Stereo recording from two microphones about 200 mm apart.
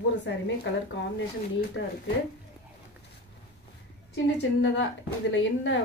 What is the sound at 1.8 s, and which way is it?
Speech, 65° left (ahead or behind).